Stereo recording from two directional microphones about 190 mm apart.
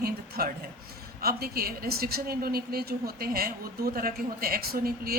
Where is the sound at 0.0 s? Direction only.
55° right (ahead or behind).